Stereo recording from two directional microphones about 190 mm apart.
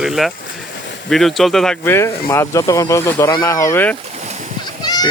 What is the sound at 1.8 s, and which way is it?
Speech, 15° left (ahead or behind).